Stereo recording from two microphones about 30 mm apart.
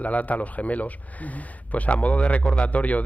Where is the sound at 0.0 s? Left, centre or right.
Left.